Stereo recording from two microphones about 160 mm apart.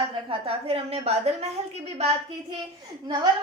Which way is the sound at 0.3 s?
35° right (ahead or behind).